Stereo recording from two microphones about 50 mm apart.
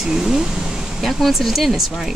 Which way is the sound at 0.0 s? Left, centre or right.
Centre.